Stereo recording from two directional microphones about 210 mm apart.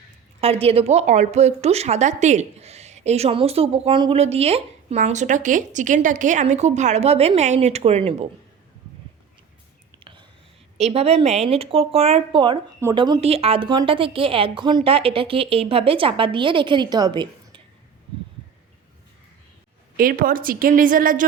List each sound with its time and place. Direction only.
0.4 s a woman's voice: 25° right (ahead or behind)
10.0 s whispering: 20° right (ahead or behind)
10.8 s speech: 30° right (ahead or behind)
20.0 s a woman's voice: 45° right (ahead or behind)